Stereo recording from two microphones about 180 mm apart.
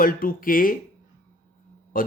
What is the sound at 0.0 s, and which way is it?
Speech, 50° left (ahead or behind).